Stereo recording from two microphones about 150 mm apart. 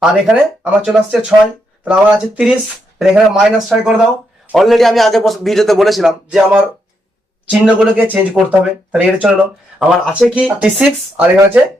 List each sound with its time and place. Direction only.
0.0 s a man's voice: 5° right (ahead or behind)